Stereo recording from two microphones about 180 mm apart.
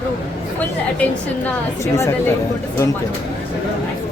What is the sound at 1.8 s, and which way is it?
Speech, 15° left (ahead or behind).